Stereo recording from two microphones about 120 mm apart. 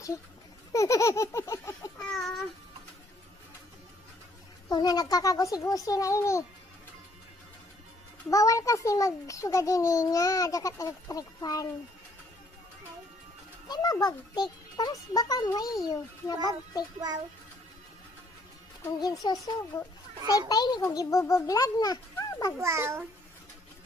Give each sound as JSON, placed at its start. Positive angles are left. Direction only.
{"t": 0.7, "sound": "a child's voice", "side_deg": 25}
{"t": 2.0, "sound": "a sound", "side_deg": 5}
{"t": 4.7, "sound": "a child's voice", "side_deg": 35}
{"t": 8.3, "sound": "a child's voice", "side_deg": 30}
{"t": 13.7, "sound": "a child's voice", "side_deg": 35}
{"t": 18.8, "sound": "a child's voice", "side_deg": 30}
{"t": 22.6, "sound": "a child's voice", "side_deg": -25}